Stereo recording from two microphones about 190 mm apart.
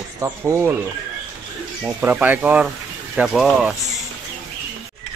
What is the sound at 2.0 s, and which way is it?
Speech, 10° right (ahead or behind).